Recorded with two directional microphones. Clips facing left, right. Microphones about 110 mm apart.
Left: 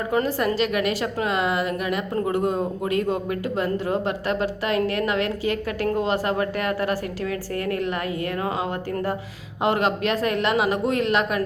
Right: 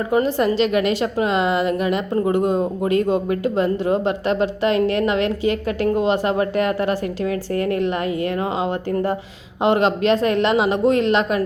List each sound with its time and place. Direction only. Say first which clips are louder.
0.1 s a woman's voice: right 5 dB; 20° right (ahead or behind)
9.6 s a woman's voice: right 5 dB; 25° right (ahead or behind)